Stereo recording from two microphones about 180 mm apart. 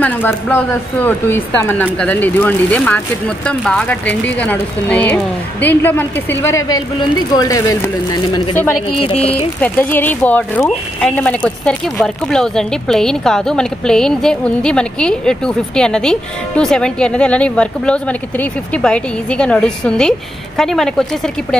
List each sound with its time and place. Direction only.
0.0 s speech: 10° left (ahead or behind)
8.8 s speech: 30° left (ahead or behind)
9.6 s speech: 10° left (ahead or behind)